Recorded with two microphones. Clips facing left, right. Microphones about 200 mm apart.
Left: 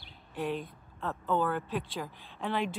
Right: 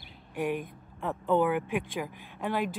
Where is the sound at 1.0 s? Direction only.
10° right (ahead or behind).